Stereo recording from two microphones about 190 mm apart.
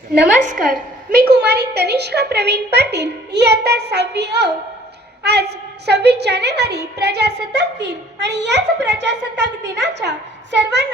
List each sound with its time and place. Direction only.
0.4 s a woman's voice: 45° right (ahead or behind); by 10.8 s 65° right (ahead or behind)